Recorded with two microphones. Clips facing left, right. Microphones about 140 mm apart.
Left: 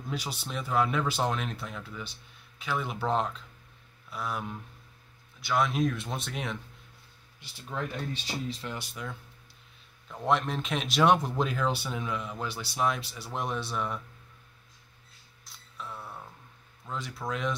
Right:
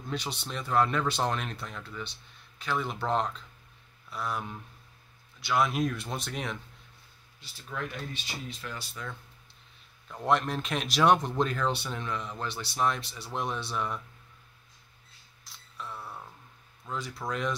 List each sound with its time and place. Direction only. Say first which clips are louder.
0.1 s speech: even; 5° left (ahead or behind)
7.7 s speech: left 2 dB; 25° left (ahead or behind)
10.0 s speech: even; centre (ahead or behind)
15.4 s a sound: even; centre (ahead or behind)
16.8 s speech: even; centre (ahead or behind)